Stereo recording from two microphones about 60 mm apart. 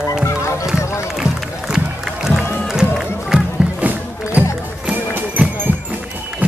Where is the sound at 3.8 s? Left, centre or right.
Right.